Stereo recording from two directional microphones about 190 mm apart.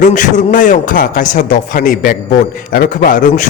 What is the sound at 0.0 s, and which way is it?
A man's voice, 40° left (ahead or behind).